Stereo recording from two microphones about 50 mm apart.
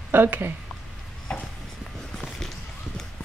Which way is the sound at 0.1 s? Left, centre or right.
Right.